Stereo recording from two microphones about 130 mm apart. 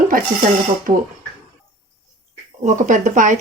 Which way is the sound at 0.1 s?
90° right.